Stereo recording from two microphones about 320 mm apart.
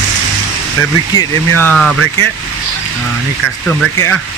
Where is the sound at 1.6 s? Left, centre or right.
Centre.